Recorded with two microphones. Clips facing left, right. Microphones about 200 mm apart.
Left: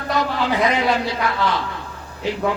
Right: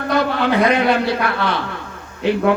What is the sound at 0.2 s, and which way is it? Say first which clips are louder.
Speech: right 3 dB; 60° right (ahead or behind).